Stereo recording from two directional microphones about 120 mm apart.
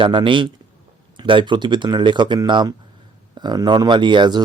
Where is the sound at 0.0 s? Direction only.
45° right (ahead or behind).